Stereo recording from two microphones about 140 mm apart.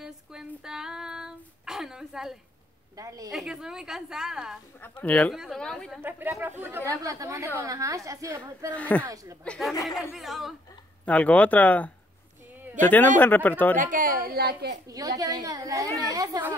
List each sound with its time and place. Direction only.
0.0 s female singing: 5° right (ahead or behind)
3.0 s a child's voice: 25° right (ahead or behind)
3.3 s a woman's voice: 5° right (ahead or behind)
4.8 s a woman's voice: 10° left (ahead or behind)
6.0 s a child's voice: 15° right (ahead or behind)
8.7 s speech: 10° left (ahead or behind)
9.0 s a child's voice: 25° right (ahead or behind)
9.4 s a woman's voice: 5° left (ahead or behind)
11.1 s speech: 10° left (ahead or behind)
13.7 s a woman's voice: 75° right (ahead or behind)
14.9 s a child's voice: 25° right (ahead or behind)